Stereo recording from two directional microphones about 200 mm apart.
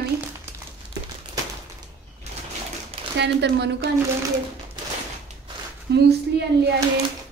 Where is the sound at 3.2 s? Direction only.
60° right (ahead or behind).